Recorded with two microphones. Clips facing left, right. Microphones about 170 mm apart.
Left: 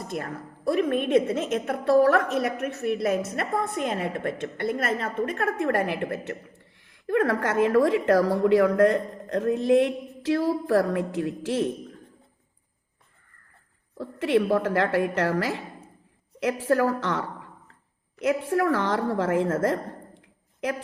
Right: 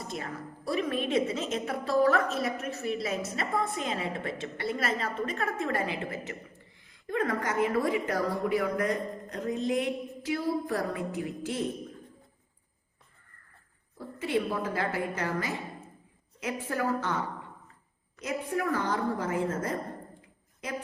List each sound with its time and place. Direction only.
0.0 s a woman's voice: 55° left (ahead or behind); by 11.7 s 80° left
14.0 s a woman's voice: 85° left